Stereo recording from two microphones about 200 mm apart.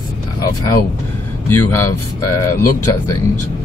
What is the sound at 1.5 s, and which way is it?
Speech, 15° left (ahead or behind).